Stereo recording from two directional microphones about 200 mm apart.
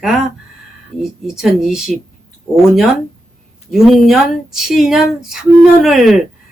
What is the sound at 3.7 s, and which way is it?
A woman's voice, centre (ahead or behind).